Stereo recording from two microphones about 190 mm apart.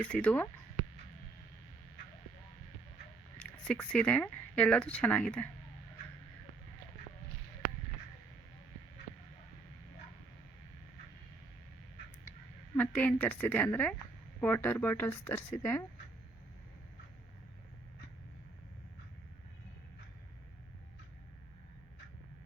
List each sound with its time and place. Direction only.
0.0 s speech: 5° left (ahead or behind)
3.3 s speech: 5° left (ahead or behind)
12.7 s speech: 10° left (ahead or behind)